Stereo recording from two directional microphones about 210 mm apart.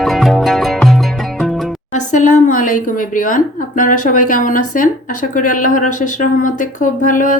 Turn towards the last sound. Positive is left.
turn(degrees=40)  # may be behind; listen again after turning